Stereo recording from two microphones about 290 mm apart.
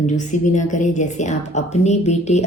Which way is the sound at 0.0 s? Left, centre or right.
Left.